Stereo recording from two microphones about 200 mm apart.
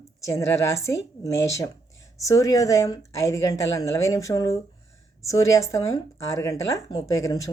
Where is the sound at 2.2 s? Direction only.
15° left (ahead or behind).